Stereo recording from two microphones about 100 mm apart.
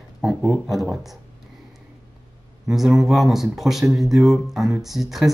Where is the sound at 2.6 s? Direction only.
Centre (ahead or behind).